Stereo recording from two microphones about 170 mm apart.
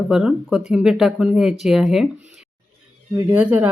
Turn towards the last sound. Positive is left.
turn(degrees=-10)  # may be behind; listen again after turning